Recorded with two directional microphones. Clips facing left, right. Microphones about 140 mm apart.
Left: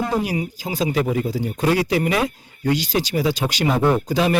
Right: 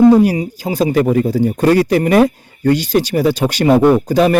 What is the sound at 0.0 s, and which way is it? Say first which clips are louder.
Speech: right 13 dB; 40° right (ahead or behind).